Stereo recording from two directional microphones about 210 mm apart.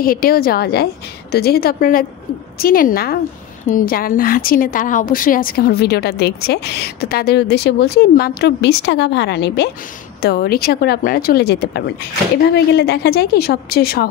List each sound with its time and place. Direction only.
0.0 s a woman's voice: 45° left (ahead or behind)